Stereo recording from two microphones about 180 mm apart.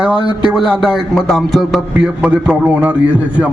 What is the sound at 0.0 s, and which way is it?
A man's voice, 5° right (ahead or behind).